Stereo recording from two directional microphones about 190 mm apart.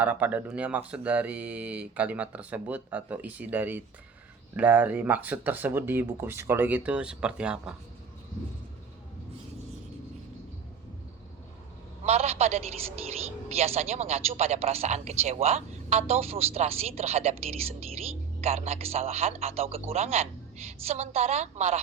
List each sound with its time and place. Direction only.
0.0 s speech: 10° right (ahead or behind)
12.0 s a man's voice: 35° right (ahead or behind)